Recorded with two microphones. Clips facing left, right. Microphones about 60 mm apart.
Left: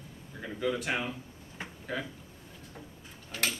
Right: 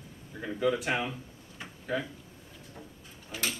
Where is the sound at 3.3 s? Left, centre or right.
Centre.